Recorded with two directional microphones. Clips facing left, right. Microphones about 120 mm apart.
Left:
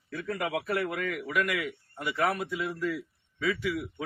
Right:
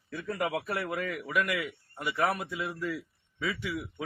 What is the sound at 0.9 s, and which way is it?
A man's voice, 20° right (ahead or behind).